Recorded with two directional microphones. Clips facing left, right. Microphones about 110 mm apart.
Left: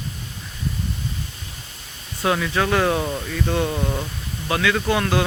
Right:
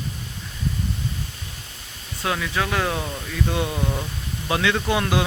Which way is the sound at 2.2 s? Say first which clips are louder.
Left 4 dB; centre (ahead or behind).